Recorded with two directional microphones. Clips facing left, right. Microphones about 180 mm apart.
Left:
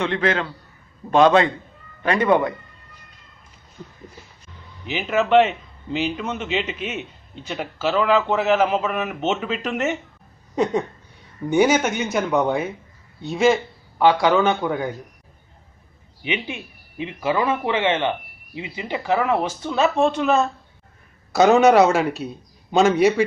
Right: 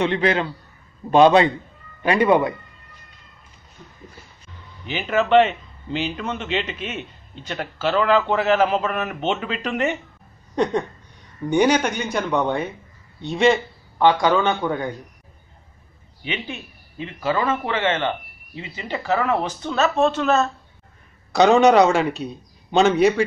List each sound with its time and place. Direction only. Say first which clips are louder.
0.0 s a man's voice: right 2 dB; 15° right (ahead or behind)
4.8 s a man's voice: even; 5° left (ahead or behind)
10.5 s a sound: even; 5° left (ahead or behind)
11.4 s a man's voice: even; 5° left (ahead or behind)
16.3 s a man's voice: left 3 dB; 15° left (ahead or behind)